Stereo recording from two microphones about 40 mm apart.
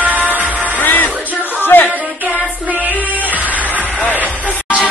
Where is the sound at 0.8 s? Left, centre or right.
Left.